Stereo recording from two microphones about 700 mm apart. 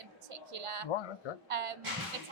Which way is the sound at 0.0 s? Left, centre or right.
Right.